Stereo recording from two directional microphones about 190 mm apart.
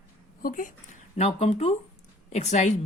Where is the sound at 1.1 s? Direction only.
30° left (ahead or behind).